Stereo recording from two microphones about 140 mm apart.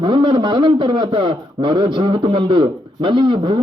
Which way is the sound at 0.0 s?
35° right (ahead or behind).